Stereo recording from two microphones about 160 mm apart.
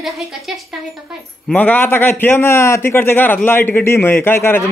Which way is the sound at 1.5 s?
10° left (ahead or behind).